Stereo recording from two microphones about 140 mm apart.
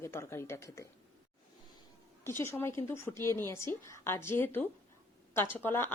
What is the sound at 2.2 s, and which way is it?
A woman's voice, 20° left (ahead or behind).